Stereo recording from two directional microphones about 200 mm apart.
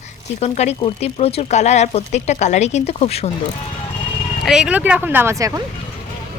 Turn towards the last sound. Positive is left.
turn(degrees=-15)  # may be behind; listen again after turning